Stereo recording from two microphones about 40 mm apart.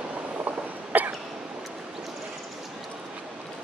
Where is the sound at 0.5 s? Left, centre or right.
Right.